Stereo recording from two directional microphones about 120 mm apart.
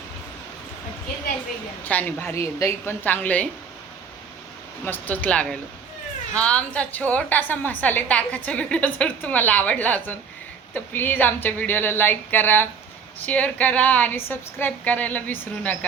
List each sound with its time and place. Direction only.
1.8 s a woman's voice: 15° left (ahead or behind)
4.9 s a woman's voice: 15° left (ahead or behind)